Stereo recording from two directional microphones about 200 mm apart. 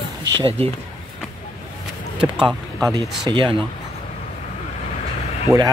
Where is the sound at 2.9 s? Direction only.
20° right (ahead or behind).